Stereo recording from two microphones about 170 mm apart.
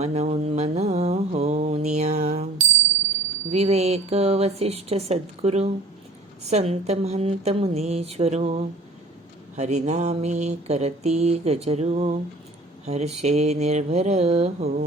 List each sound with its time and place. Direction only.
0.0 s mantra: 40° right (ahead or behind)
3.5 s mantra: 40° right (ahead or behind)
12.8 s speech: 40° right (ahead or behind)
13.2 s mantra: 40° right (ahead or behind)